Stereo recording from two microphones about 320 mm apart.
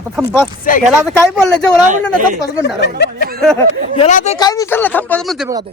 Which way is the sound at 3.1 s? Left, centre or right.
Right.